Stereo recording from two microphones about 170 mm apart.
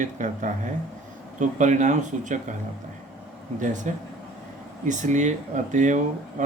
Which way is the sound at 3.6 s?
45° right (ahead or behind).